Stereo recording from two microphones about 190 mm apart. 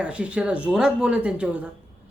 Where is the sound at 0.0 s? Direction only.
5° right (ahead or behind).